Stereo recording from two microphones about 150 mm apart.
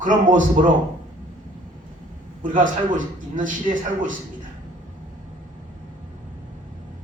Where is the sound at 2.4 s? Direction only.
60° right (ahead or behind).